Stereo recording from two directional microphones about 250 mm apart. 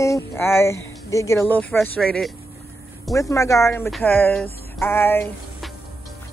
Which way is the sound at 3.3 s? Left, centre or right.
Centre.